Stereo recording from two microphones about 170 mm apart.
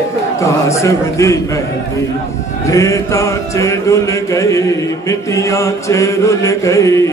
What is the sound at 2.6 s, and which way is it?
Chant, 20° left (ahead or behind).